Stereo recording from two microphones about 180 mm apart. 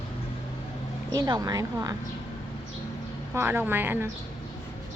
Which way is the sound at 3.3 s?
10° right (ahead or behind).